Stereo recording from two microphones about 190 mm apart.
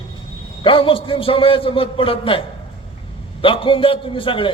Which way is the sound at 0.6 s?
25° left (ahead or behind).